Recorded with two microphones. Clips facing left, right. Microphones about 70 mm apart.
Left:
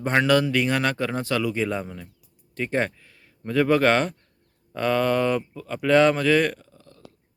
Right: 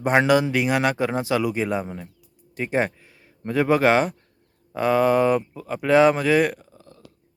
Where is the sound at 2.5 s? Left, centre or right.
Centre.